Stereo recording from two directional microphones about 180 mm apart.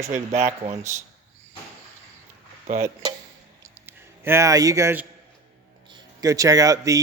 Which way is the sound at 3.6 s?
10° right (ahead or behind).